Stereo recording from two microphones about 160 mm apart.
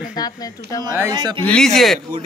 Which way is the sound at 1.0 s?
25° right (ahead or behind).